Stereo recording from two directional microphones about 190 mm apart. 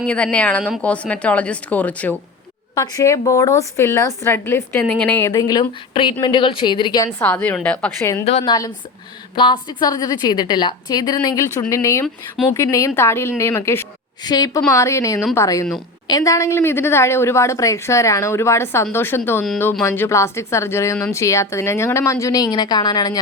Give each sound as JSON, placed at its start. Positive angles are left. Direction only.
{"t": 0.0, "sound": "a woman's voice", "side_deg": 5}
{"t": 2.7, "sound": "a woman's voice", "side_deg": 20}
{"t": 7.2, "sound": "a woman's voice", "side_deg": 10}
{"t": 8.2, "sound": "a woman's voice", "side_deg": 30}